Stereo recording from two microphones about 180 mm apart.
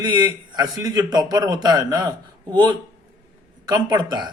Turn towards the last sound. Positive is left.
turn(degrees=-25)  # may be behind; listen again after turning